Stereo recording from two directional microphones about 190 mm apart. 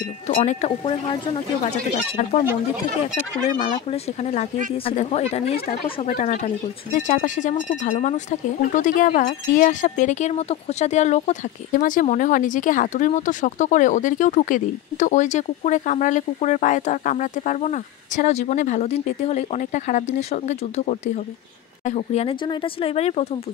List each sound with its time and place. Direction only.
0.4 s speech: 35° left (ahead or behind)
3.7 s speech: 35° left (ahead or behind)